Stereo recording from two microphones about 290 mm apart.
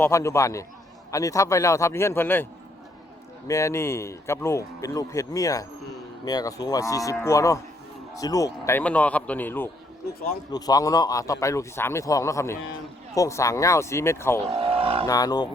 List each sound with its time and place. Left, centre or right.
0.0 s speech: centre
14.4 s speech: centre
15.0 s speech: centre